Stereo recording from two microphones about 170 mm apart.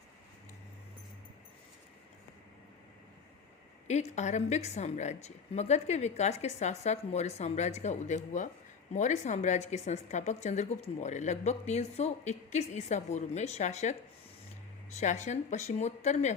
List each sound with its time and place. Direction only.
3.8 s a woman's voice: 40° left (ahead or behind)
14.9 s a woman's voice: 45° left (ahead or behind)